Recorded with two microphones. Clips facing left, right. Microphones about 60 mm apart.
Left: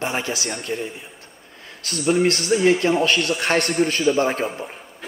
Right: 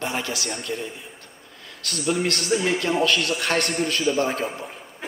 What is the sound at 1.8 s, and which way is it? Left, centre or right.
Speech, right.